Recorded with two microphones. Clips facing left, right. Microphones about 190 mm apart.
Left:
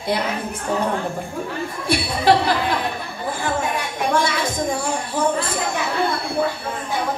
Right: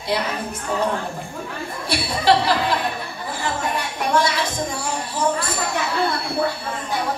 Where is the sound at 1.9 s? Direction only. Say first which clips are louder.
Left 1 dB; 50° left (ahead or behind).